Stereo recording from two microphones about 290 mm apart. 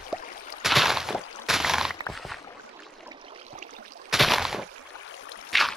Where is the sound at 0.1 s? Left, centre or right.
Centre.